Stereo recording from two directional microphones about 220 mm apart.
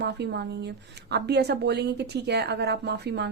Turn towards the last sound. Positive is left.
turn(degrees=-50)  # may be behind; listen again after turning